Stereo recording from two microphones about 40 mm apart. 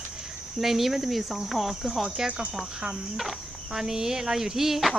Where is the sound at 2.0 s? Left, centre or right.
Centre.